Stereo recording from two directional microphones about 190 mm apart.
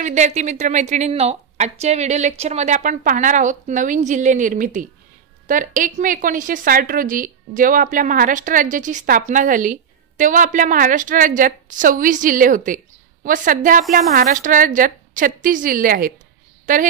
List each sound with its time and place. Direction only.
0.0 s a woman's voice: 40° right (ahead or behind)